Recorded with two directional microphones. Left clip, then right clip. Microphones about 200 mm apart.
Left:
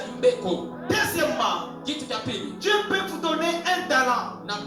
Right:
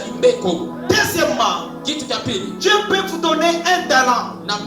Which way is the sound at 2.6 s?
50° right (ahead or behind).